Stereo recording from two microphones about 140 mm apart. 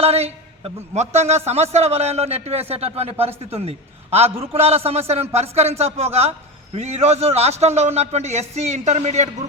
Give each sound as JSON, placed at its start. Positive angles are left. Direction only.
{"t": 0.0, "sound": "a man's voice", "side_deg": -45}